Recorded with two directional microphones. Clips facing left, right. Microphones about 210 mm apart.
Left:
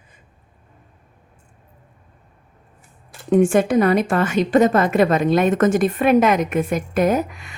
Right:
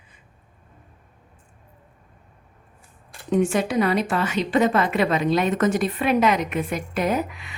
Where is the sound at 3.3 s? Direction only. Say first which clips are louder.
Left 6 dB; 50° left (ahead or behind).